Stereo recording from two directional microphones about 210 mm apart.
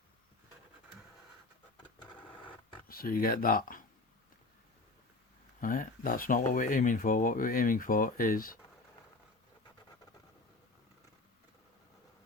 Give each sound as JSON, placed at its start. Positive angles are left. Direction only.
{"t": 2.8, "sound": "speech", "side_deg": 45}
{"t": 5.5, "sound": "speech", "side_deg": 40}